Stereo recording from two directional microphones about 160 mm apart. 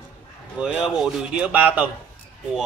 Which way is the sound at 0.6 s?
5° right (ahead or behind).